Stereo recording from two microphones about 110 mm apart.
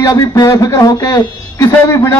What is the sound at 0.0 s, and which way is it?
Speech, 30° left (ahead or behind).